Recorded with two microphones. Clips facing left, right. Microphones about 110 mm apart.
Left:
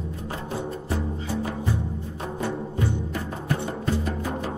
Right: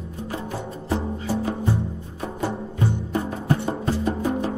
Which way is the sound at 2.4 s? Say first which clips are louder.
Right 2 dB; 30° right (ahead or behind).